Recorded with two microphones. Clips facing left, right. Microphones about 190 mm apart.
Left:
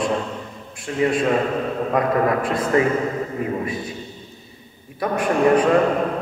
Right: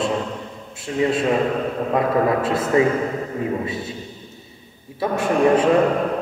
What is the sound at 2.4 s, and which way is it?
Speech, 25° right (ahead or behind).